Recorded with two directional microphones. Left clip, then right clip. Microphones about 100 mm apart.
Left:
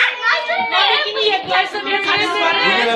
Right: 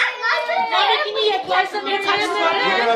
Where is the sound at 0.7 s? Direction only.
65° right (ahead or behind).